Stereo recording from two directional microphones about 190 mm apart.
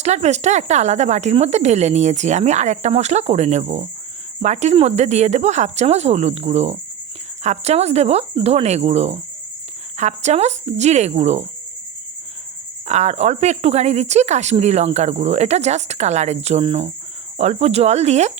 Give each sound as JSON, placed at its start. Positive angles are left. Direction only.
{"t": 0.0, "sound": "speech", "side_deg": -35}
{"t": 12.9, "sound": "speech", "side_deg": -35}